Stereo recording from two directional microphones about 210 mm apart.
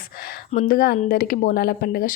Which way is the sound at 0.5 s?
40° left (ahead or behind).